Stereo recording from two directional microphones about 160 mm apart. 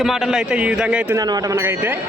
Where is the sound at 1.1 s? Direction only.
20° right (ahead or behind).